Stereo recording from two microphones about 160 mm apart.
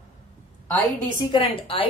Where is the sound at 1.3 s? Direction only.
35° left (ahead or behind).